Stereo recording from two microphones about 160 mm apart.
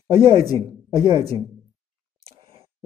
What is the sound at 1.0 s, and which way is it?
Speech, 30° right (ahead or behind).